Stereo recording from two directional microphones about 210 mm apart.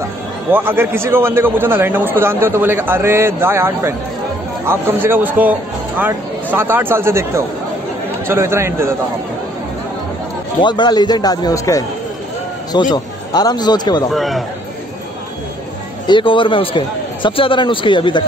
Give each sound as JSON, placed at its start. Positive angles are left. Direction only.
{"t": 0.5, "sound": "a man's voice", "side_deg": -10}
{"t": 10.6, "sound": "a man's voice", "side_deg": 20}
{"t": 12.9, "sound": "speech", "side_deg": 20}
{"t": 14.1, "sound": "a man's voice", "side_deg": 0}
{"t": 16.1, "sound": "a man's voice", "side_deg": 25}